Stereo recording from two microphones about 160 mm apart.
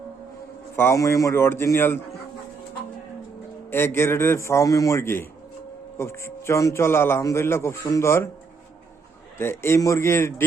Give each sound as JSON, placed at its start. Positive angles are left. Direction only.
{"t": 0.8, "sound": "speech", "side_deg": 15}
{"t": 3.7, "sound": "speech", "side_deg": 15}
{"t": 9.4, "sound": "speech", "side_deg": 15}